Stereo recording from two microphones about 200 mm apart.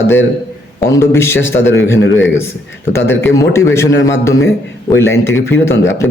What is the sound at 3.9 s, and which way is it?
Speech, 70° left (ahead or behind).